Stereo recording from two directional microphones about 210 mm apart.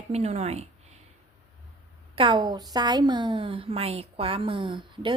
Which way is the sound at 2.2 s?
20° right (ahead or behind).